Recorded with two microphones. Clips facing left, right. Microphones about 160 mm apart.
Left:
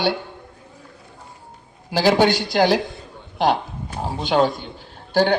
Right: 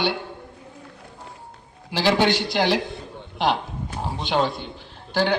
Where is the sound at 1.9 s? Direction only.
45° left (ahead or behind).